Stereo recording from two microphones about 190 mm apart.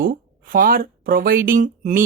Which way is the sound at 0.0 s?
45° right (ahead or behind).